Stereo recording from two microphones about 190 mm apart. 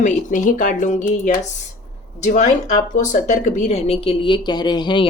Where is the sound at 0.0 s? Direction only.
40° left (ahead or behind).